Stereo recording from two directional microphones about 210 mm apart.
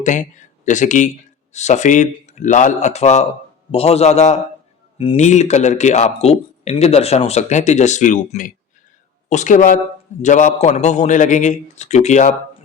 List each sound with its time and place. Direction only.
0.0 s speech: 35° left (ahead or behind)